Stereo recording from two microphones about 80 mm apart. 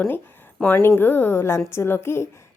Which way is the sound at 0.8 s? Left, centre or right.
Left.